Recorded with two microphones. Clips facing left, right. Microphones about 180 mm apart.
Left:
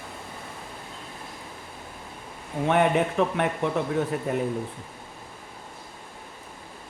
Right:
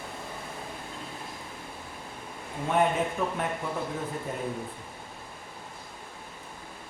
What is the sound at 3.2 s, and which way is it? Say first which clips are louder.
Speech: left 6 dB; 75° left (ahead or behind).